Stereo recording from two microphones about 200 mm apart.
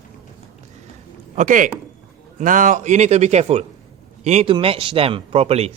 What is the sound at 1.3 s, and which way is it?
A man's voice, 40° right (ahead or behind).